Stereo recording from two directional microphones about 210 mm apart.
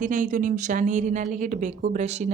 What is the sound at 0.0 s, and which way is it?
Speech, 40° right (ahead or behind).